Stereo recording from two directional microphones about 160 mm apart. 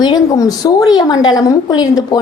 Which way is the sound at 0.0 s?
25° left (ahead or behind).